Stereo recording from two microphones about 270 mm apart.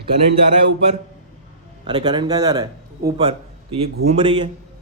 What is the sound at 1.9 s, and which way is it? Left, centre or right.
A man's voice, centre.